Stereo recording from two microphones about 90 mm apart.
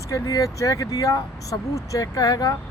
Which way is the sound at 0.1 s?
40° left (ahead or behind).